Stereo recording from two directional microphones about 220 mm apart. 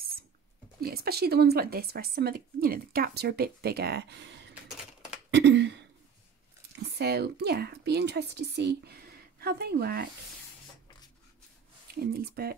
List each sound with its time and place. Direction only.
0.7 s speech: 45° right (ahead or behind)
4.6 s typing: centre (ahead or behind)
5.3 s speech: 50° right (ahead or behind)
6.9 s a woman's voice: 45° right (ahead or behind)
11.9 s speech: 45° right (ahead or behind)